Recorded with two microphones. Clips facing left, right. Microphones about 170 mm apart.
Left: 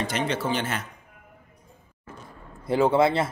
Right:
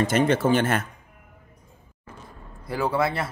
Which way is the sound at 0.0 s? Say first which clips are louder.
Right 6 dB; 50° right (ahead or behind).